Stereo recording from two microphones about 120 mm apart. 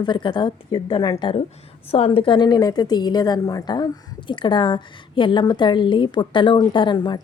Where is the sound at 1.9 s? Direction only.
55° left (ahead or behind).